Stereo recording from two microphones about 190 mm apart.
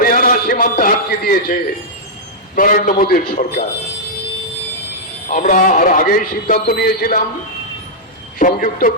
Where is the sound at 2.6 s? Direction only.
45° left (ahead or behind).